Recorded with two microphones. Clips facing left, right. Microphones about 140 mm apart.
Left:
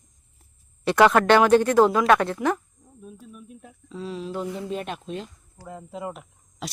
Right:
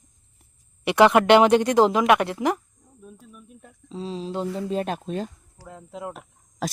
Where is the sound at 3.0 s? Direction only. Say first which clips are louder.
Left 3 dB; 5° left (ahead or behind).